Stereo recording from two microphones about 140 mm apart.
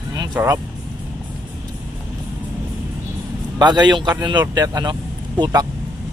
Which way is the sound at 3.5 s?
30° right (ahead or behind).